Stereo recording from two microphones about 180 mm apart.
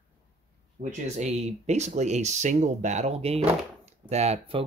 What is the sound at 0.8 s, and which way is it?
Speech, 40° right (ahead or behind).